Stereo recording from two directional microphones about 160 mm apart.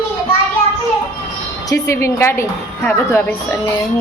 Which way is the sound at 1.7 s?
20° left (ahead or behind).